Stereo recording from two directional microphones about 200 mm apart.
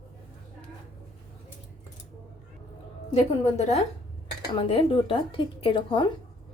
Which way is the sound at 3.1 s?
35° left (ahead or behind).